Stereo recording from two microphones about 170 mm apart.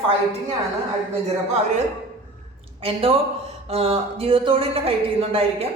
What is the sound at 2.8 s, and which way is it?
A woman's voice, 35° right (ahead or behind).